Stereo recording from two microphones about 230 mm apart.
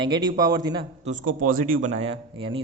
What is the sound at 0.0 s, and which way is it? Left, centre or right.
Speech, centre.